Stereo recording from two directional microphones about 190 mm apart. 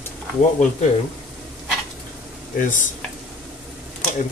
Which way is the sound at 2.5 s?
40° left (ahead or behind).